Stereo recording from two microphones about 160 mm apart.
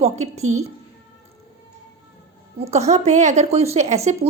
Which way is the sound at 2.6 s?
45° right (ahead or behind).